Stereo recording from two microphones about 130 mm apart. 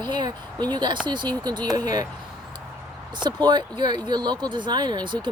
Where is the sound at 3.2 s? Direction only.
35° right (ahead or behind).